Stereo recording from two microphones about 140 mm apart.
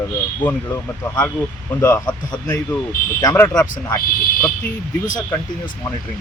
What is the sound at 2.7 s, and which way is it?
Speech, 15° left (ahead or behind).